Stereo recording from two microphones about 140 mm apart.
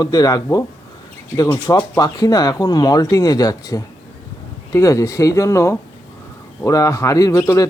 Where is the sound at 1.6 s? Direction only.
25° left (ahead or behind).